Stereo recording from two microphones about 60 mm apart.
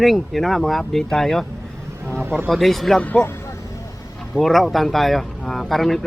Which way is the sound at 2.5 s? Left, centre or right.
Centre.